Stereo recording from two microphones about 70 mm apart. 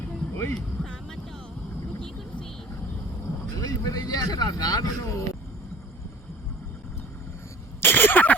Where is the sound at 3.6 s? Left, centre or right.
Left.